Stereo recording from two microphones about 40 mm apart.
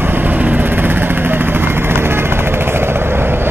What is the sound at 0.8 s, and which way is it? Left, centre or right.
Vehicle, right.